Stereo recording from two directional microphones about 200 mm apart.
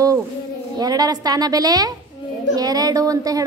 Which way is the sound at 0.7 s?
20° right (ahead or behind).